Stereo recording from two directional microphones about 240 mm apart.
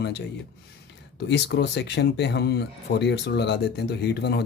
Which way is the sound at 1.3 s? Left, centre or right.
Left.